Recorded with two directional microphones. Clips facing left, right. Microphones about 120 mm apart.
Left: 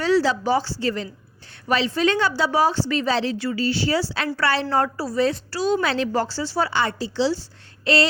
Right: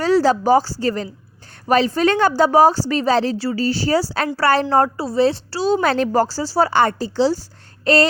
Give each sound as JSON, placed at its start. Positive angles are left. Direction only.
{"t": 0.0, "sound": "a woman's voice", "side_deg": -45}
{"t": 4.9, "sound": "a woman's voice", "side_deg": -30}
{"t": 5.8, "sound": "a woman's voice", "side_deg": -45}